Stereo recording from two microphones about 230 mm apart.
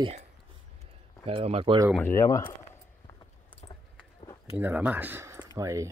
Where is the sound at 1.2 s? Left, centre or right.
Right.